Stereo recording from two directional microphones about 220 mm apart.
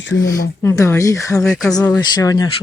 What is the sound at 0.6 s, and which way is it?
Speech, 15° left (ahead or behind).